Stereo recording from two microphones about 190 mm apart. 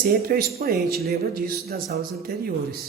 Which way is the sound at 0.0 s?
50° right (ahead or behind).